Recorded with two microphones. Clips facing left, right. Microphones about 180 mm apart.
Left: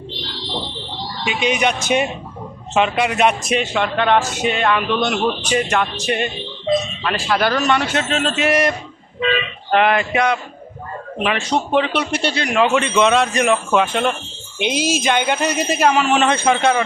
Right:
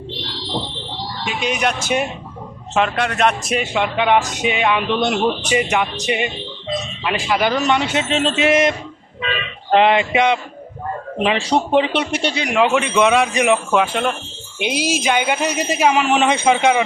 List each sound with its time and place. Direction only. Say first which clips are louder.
1.2 s speech: left 2 dB; centre (ahead or behind)
3.6 s speech: even; 10° right (ahead or behind)
5.7 s a man's voice: even; 15° right (ahead or behind)
9.7 s a man's voice: right 2 dB; 25° right (ahead or behind)
13.7 s speech: left 1 dB; 5° right (ahead or behind)